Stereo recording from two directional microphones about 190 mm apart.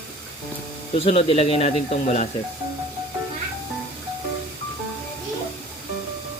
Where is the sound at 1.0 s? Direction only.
30° left (ahead or behind).